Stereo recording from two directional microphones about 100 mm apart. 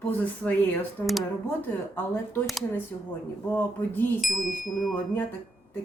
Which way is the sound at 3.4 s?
20° left (ahead or behind).